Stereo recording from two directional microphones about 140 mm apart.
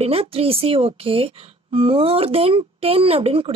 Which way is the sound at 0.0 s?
45° right (ahead or behind).